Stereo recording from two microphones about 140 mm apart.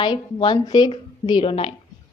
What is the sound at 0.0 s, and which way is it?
A woman's voice, 35° left (ahead or behind).